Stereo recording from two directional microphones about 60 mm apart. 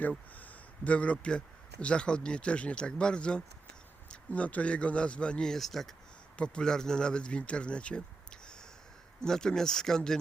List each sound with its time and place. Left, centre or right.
0.3 s a man's voice: left; by 5.9 s centre
6.3 s a man's voice: centre